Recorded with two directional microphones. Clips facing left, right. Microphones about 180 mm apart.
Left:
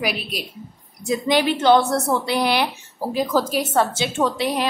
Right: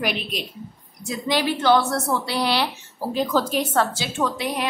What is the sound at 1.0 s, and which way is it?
A woman's voice, 15° left (ahead or behind).